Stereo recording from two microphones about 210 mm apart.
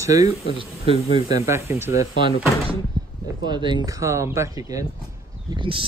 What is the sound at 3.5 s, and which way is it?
Speech, 20° right (ahead or behind).